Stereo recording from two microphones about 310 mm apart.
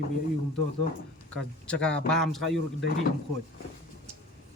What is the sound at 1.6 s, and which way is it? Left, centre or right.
Speech, centre.